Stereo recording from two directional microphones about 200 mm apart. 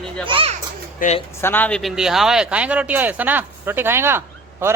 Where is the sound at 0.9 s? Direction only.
35° left (ahead or behind).